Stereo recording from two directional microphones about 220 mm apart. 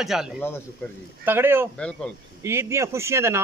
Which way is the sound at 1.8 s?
5° left (ahead or behind).